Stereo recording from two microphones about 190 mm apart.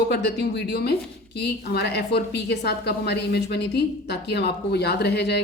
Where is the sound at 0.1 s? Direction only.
60° left (ahead or behind).